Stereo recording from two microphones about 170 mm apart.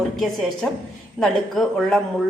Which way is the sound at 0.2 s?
Centre (ahead or behind).